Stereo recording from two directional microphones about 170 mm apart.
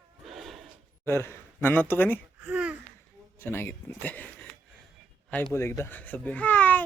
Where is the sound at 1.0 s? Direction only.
15° left (ahead or behind).